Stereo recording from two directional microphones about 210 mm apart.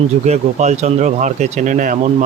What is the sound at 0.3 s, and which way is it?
Speech, 30° right (ahead or behind).